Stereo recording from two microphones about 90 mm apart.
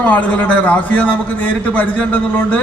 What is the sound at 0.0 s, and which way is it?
A man's voice, 15° left (ahead or behind).